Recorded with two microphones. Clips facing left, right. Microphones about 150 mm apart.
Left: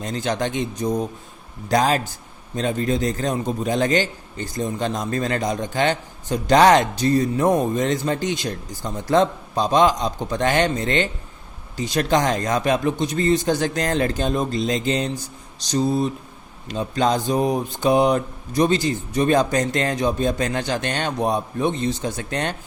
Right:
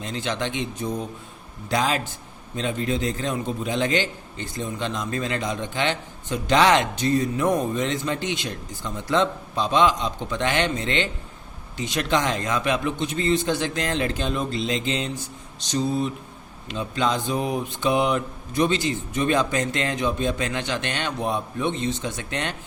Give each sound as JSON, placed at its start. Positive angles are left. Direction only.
{"t": 0.0, "sound": "a man's voice", "side_deg": 40}